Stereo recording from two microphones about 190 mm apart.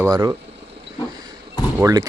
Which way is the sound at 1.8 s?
20° right (ahead or behind).